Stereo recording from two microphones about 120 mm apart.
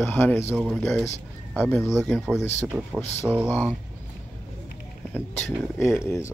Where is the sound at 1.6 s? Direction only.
20° left (ahead or behind).